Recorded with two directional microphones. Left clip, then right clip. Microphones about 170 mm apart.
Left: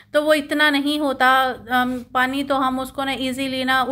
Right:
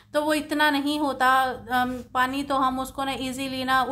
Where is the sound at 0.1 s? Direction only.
15° left (ahead or behind).